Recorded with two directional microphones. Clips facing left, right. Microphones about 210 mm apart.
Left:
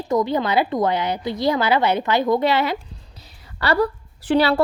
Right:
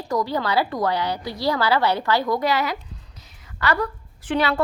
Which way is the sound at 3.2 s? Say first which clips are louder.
Left 1 dB; 30° left (ahead or behind).